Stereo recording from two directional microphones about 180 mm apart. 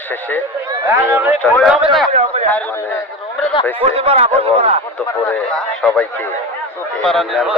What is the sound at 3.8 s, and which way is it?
Speech, 35° right (ahead or behind).